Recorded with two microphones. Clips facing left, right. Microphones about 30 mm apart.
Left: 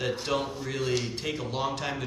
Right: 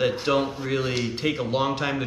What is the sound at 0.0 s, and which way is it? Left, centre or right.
Speech, right.